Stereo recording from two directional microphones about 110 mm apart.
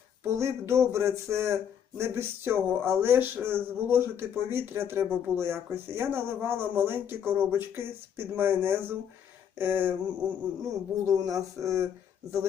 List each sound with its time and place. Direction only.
0.3 s speech: 25° right (ahead or behind)
9.6 s a sound: 15° right (ahead or behind)
10.6 s speech: 30° right (ahead or behind)